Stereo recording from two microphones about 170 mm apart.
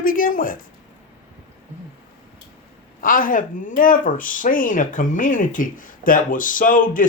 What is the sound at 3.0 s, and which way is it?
Speech, 55° left (ahead or behind).